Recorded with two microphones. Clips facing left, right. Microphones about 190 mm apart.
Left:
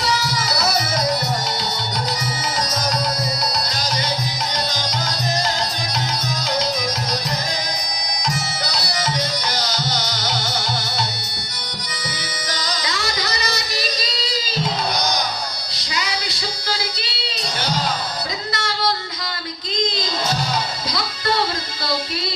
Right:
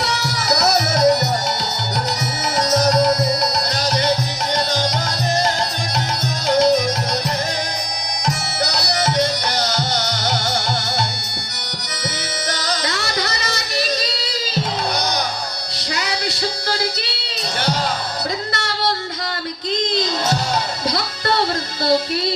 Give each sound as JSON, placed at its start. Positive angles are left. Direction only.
{"t": 0.0, "sound": "music", "side_deg": -65}
{"t": 2.6, "sound": "music", "side_deg": -65}
{"t": 6.5, "sound": "music", "side_deg": -60}
{"t": 8.7, "sound": "music", "side_deg": -70}
{"t": 12.5, "sound": "music", "side_deg": -65}
{"t": 15.8, "sound": "music", "side_deg": -65}